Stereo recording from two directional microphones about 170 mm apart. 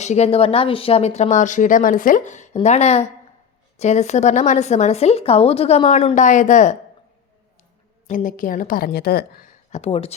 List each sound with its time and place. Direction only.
0.0 s speech: 40° left (ahead or behind)
8.0 s a woman's voice: 50° left (ahead or behind)
9.7 s speech: 35° left (ahead or behind)